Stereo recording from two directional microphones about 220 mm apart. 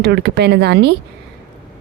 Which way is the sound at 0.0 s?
50° right (ahead or behind).